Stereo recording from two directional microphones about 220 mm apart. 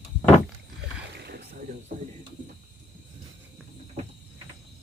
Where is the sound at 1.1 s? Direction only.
45° right (ahead or behind).